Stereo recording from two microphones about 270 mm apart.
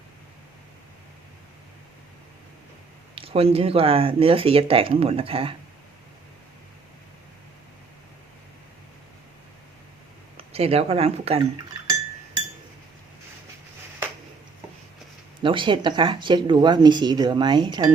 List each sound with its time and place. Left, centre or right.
3.2 s speech: right
10.3 s speech: right
15.4 s speech: centre